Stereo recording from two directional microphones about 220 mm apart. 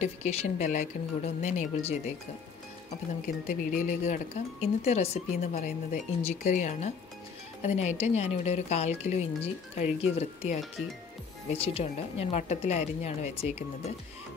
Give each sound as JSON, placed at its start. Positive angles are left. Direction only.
{"t": 0.0, "sound": "speech", "side_deg": 30}
{"t": 3.7, "sound": "a woman's voice", "side_deg": 35}